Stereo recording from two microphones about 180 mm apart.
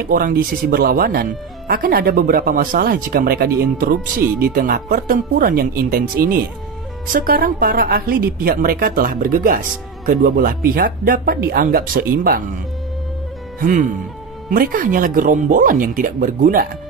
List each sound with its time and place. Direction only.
0.0 s a woman's voice: 55° right (ahead or behind)
13.6 s a woman's voice: 50° right (ahead or behind)